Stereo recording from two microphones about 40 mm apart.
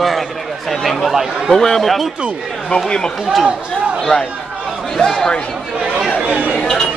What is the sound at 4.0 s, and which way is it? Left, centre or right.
A man's voice, centre.